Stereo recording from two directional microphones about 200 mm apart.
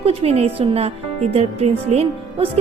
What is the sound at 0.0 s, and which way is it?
Speech, 30° right (ahead or behind).